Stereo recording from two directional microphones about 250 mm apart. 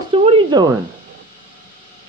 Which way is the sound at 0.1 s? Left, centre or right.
Right.